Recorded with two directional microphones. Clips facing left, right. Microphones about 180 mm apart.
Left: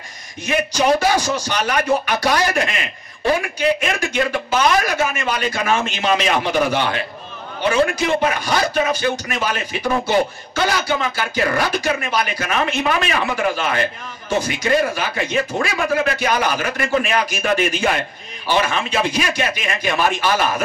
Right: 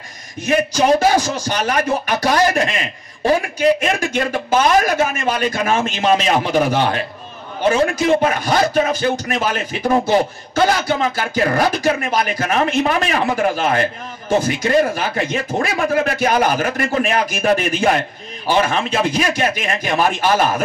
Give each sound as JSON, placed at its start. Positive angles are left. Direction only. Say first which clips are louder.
{"t": 0.5, "sound": "speech", "louder": "right 3 dB", "side_deg": -45}